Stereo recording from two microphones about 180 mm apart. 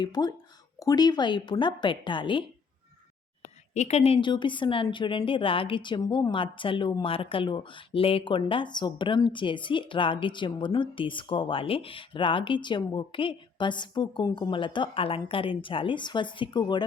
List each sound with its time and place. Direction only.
0.0 s a woman's voice: 20° left (ahead or behind)
3.4 s a woman's voice: 40° left (ahead or behind)